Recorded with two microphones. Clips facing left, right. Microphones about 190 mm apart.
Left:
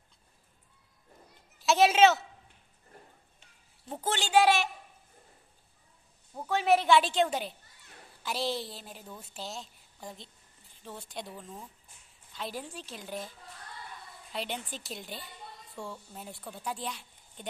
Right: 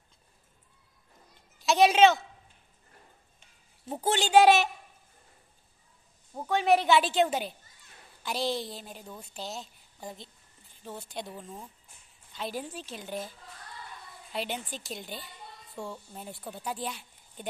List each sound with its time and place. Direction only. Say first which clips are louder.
1.6 s a woman's voice: right 1 dB; centre (ahead or behind)
3.9 s a woman's voice: right 4 dB; 15° right (ahead or behind)
6.5 s a woman's voice: right 1 dB; centre (ahead or behind)
14.3 s speech: right 2 dB; 5° right (ahead or behind)